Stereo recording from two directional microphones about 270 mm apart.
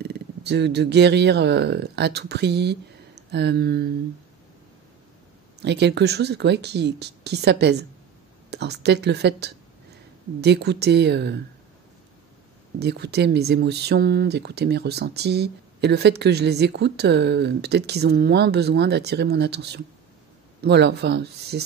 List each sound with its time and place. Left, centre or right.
0.0 s speech: right
5.6 s speech: right
12.7 s speech: right